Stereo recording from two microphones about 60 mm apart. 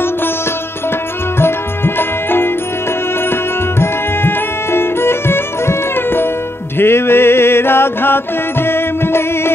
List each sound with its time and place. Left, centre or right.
2.0 s music: left
3.8 s music: left